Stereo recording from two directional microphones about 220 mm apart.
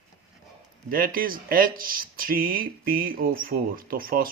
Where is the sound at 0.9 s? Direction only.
40° right (ahead or behind).